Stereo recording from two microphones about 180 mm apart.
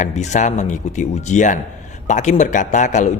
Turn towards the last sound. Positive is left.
turn(degrees=40)  # may be behind; listen again after turning